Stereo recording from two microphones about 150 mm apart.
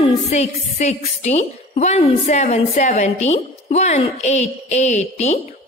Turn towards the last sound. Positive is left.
turn(degrees=50)  # may be behind; listen again after turning